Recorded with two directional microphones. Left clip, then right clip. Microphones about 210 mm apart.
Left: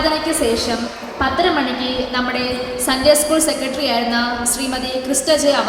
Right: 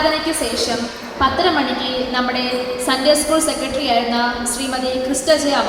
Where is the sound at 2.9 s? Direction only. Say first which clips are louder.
Left 2 dB; 60° left (ahead or behind).